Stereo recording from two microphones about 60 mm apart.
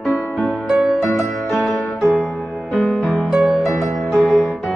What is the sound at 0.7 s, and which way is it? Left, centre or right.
Music, centre.